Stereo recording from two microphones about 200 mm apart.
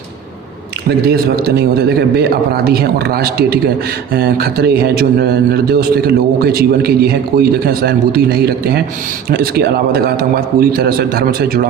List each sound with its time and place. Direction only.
0.9 s a man's voice: 50° right (ahead or behind)